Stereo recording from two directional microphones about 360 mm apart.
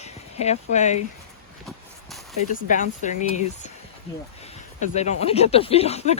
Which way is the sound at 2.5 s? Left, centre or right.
Left.